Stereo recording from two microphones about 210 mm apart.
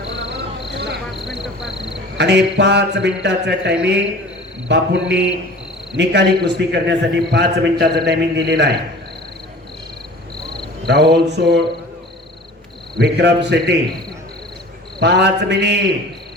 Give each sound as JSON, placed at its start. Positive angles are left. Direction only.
{"t": 0.7, "sound": "cricket", "side_deg": -55}
{"t": 2.1, "sound": "a man's voice", "side_deg": -55}
{"t": 10.8, "sound": "a man's voice", "side_deg": -50}
{"t": 13.0, "sound": "a man's voice", "side_deg": -55}
{"t": 14.9, "sound": "a man's voice", "side_deg": -50}